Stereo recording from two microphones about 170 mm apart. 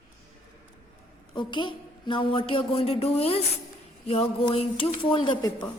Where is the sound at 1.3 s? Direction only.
25° left (ahead or behind).